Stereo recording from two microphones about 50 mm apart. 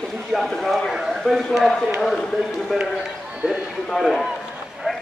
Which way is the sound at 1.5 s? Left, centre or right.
Centre.